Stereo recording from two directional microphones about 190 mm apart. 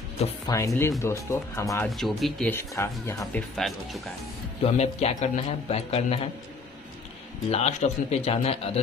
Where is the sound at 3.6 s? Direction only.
Centre (ahead or behind).